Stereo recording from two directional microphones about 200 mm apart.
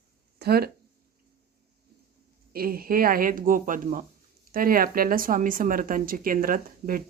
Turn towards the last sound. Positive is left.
turn(degrees=-45)  # may be behind; listen again after turning